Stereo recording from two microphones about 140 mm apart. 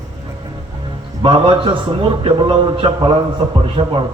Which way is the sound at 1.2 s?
40° right (ahead or behind).